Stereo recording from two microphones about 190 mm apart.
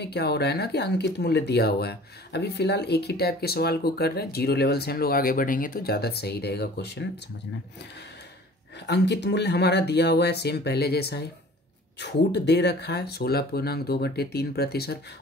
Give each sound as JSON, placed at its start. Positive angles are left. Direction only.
{"t": 0.0, "sound": "speech", "side_deg": 60}
{"t": 8.8, "sound": "speech", "side_deg": 60}